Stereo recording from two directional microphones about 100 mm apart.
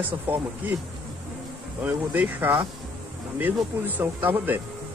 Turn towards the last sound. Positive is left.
turn(degrees=-20)  # may be behind; listen again after turning